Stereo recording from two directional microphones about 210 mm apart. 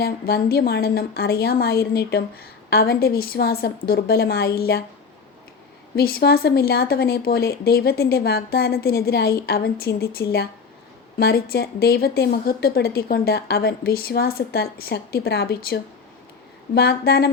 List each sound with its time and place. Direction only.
0.0 s a woman's voice: 45° left (ahead or behind)
6.0 s a woman's voice: 45° left (ahead or behind)